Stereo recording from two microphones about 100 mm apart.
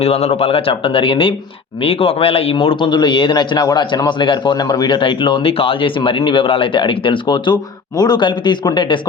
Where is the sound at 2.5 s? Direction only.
60° left (ahead or behind).